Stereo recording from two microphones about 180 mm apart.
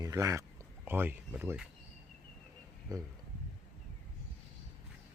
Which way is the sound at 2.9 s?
20° right (ahead or behind).